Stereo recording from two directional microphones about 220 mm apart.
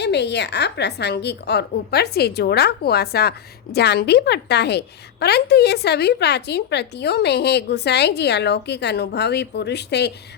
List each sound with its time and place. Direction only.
0.0 s a woman's voice: 50° left (ahead or behind)